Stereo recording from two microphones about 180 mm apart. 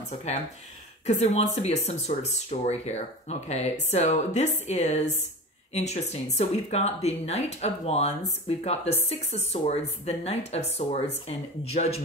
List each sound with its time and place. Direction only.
1.0 s speech: 35° left (ahead or behind)